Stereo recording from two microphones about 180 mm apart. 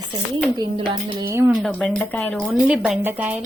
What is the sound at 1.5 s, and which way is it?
Speech, centre (ahead or behind).